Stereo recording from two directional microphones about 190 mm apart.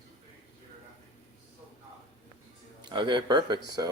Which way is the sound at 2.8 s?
25° right (ahead or behind).